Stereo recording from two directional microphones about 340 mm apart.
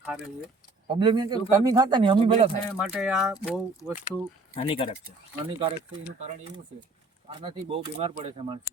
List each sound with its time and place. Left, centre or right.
0.0 s speech: centre
0.9 s speech: centre
2.8 s speech: centre
4.5 s speech: centre
5.5 s speech: centre
7.4 s speech: centre